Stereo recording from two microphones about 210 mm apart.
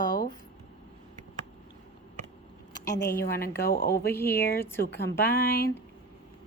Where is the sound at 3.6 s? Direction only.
45° left (ahead or behind).